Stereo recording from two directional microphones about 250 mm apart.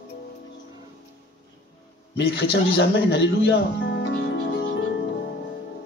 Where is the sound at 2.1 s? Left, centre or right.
Left.